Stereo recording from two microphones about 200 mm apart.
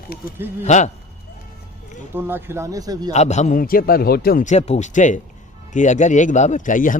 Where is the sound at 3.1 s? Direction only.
35° left (ahead or behind).